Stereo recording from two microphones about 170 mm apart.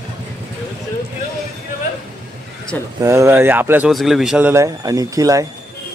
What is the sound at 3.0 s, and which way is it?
Speech, 15° right (ahead or behind).